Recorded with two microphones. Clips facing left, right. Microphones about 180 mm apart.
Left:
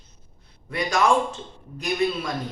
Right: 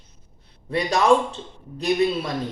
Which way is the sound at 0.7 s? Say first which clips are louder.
Right 3 dB; 30° right (ahead or behind).